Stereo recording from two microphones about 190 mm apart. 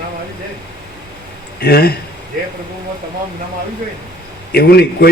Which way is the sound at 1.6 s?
55° left (ahead or behind).